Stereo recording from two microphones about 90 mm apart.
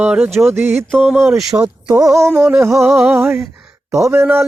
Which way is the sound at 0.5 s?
25° right (ahead or behind).